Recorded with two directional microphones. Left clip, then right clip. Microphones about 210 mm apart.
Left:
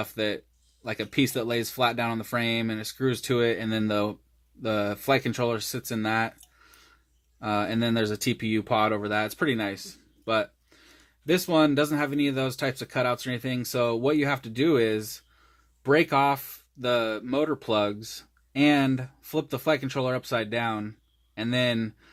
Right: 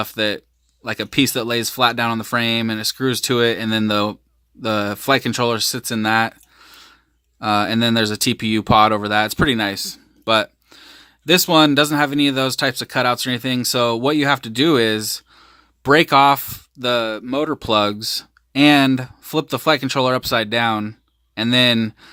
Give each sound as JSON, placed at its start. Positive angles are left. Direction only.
{"t": 0.0, "sound": "speech", "side_deg": -25}